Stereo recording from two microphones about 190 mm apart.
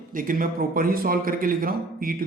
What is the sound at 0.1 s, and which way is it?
A man's voice, 45° right (ahead or behind).